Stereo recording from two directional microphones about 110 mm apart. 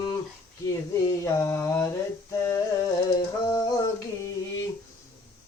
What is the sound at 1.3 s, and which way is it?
Mantra, 25° left (ahead or behind).